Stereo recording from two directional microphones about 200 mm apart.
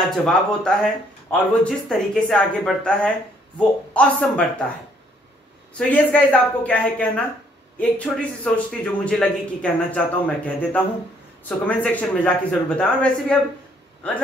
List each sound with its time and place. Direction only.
0.1 s a man's voice: 5° left (ahead or behind)
5.8 s a man's voice: 5° left (ahead or behind)